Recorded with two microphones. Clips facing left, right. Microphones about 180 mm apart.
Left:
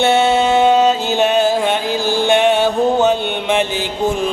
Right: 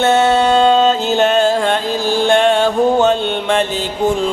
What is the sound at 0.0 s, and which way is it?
Music, 10° left (ahead or behind).